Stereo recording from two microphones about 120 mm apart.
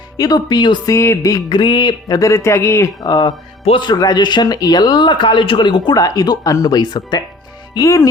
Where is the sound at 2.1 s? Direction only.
25° left (ahead or behind).